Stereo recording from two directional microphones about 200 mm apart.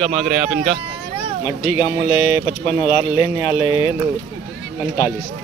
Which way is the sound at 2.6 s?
30° left (ahead or behind).